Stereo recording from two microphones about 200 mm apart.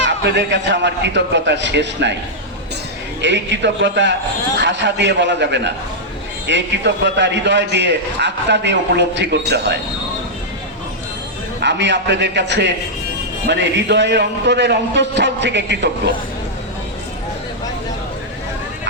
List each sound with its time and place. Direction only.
0.0 s a man's voice: 60° right (ahead or behind)
3.2 s a man's voice: 60° right (ahead or behind)
11.6 s a man's voice: 60° right (ahead or behind)